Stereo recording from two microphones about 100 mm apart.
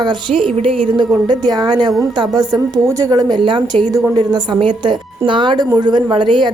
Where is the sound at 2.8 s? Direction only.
30° right (ahead or behind).